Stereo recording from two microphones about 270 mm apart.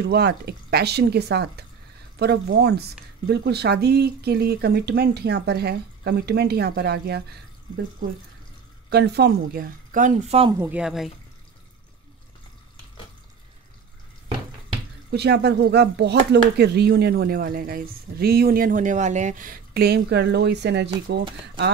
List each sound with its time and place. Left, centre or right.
0.1 s speech: right
8.9 s speech: right
10.6 s speech: centre
15.0 s speech: right